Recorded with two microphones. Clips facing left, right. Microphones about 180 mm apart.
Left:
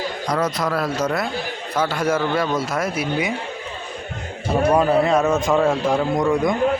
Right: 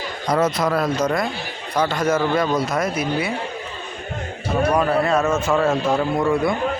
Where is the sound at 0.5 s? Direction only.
Centre (ahead or behind).